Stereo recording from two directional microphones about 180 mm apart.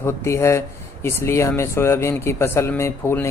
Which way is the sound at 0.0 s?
15° left (ahead or behind).